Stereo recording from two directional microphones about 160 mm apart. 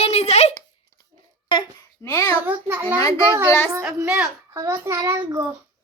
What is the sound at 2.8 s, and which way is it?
Speech, 20° left (ahead or behind).